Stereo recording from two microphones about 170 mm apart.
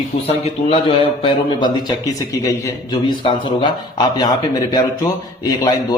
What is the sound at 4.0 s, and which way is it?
Speech, 25° left (ahead or behind).